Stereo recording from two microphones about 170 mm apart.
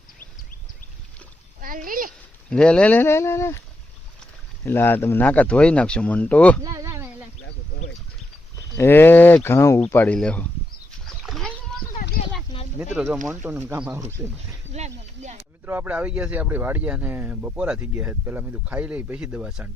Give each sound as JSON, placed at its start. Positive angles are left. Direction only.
{"t": 1.6, "sound": "a child's voice", "side_deg": -55}
{"t": 2.5, "sound": "speech", "side_deg": 5}
{"t": 6.6, "sound": "a sound", "side_deg": -20}
{"t": 8.7, "sound": "speech", "side_deg": 15}
{"t": 11.0, "sound": "splash", "side_deg": 0}
{"t": 12.9, "sound": "speech", "side_deg": -5}
{"t": 14.7, "sound": "speech", "side_deg": -40}
{"t": 15.6, "sound": "speech", "side_deg": -10}